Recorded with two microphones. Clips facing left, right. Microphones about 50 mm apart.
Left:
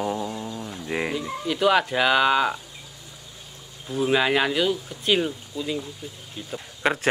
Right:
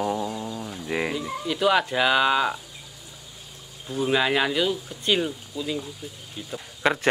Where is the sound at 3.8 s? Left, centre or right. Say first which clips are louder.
Left 1 dB; centre.